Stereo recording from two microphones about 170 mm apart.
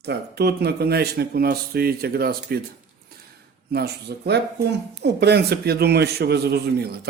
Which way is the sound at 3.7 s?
70° right (ahead or behind).